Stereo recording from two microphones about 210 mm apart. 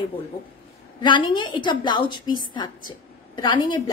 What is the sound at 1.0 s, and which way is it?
A woman's voice, 20° left (ahead or behind).